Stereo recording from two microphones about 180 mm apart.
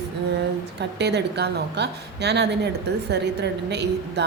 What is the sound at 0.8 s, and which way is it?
A woman's voice, 70° right (ahead or behind).